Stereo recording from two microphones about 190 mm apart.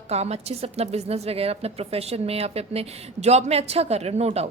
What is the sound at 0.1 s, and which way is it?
A woman's voice, 35° right (ahead or behind).